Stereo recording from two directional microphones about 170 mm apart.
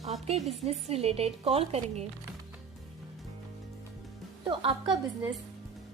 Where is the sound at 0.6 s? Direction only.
40° right (ahead or behind).